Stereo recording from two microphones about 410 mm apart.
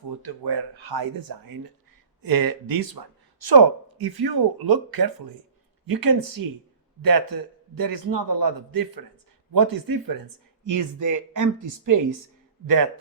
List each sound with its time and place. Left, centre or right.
0.1 s a man's voice: right
10.7 s a man's voice: right